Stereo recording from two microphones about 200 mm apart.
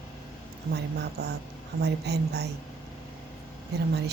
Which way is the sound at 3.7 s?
55° right (ahead or behind).